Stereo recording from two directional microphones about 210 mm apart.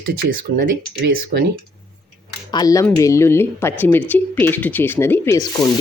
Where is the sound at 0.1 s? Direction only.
45° right (ahead or behind).